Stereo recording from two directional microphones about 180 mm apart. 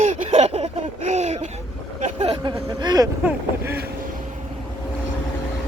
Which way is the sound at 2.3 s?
25° right (ahead or behind).